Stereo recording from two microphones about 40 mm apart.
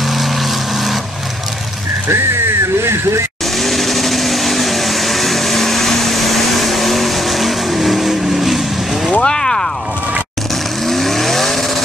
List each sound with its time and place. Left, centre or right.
0.0 s vehicle: centre
2.0 s music: right
3.5 s vacuum cleaner: centre
9.2 s a sound: centre
10.5 s vehicle: centre